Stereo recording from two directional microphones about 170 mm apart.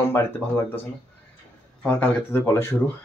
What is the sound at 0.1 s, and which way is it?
Speech, 15° left (ahead or behind).